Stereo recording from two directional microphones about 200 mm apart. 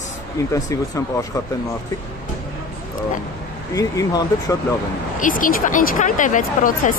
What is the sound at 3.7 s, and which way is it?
Speech, 15° left (ahead or behind).